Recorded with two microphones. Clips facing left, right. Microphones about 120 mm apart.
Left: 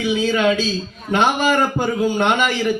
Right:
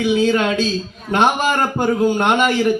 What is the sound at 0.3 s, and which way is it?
Speech, 45° right (ahead or behind).